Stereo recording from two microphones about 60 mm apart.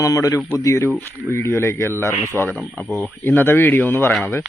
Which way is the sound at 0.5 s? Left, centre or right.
Left.